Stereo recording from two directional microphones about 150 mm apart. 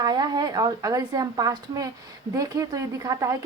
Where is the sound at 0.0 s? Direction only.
25° right (ahead or behind).